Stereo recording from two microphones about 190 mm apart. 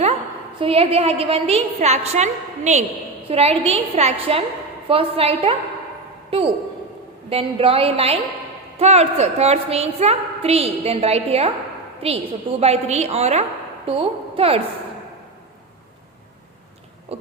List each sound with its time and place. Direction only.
0.6 s a woman's voice: 30° right (ahead or behind)
17.1 s a woman's voice: 30° right (ahead or behind)